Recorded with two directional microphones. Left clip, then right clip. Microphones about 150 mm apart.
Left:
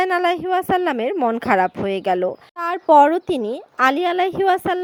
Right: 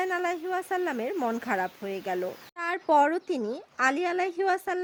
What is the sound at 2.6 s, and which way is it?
A woman's voice, 15° left (ahead or behind).